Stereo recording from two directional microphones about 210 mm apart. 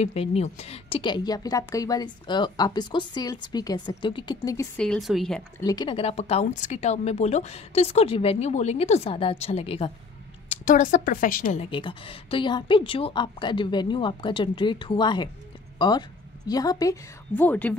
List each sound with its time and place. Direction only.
0.0 s a woman's voice: 30° left (ahead or behind)
4.7 s speech: centre (ahead or behind)
5.6 s a woman's voice: 20° left (ahead or behind)
10.6 s a woman's voice: 40° left (ahead or behind); by 17.7 s 10° left (ahead or behind)